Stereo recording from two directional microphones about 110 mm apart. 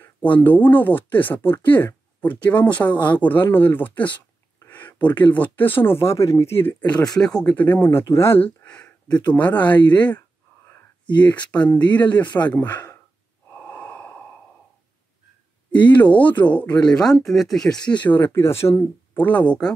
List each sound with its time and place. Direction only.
0.0 s speech: 15° left (ahead or behind)
11.1 s speech: 15° left (ahead or behind)
13.5 s breathing: 15° left (ahead or behind)
15.7 s speech: 15° left (ahead or behind)
18.0 s speech: 20° left (ahead or behind)